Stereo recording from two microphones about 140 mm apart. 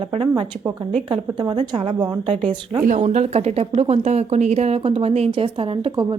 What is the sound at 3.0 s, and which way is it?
A woman's voice, 50° right (ahead or behind).